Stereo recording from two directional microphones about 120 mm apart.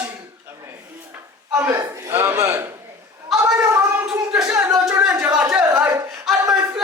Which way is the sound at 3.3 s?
Centre (ahead or behind).